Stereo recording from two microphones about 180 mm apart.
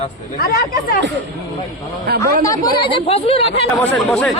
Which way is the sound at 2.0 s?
55° right (ahead or behind).